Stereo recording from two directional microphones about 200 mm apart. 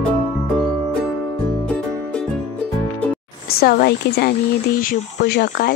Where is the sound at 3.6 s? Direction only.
50° left (ahead or behind).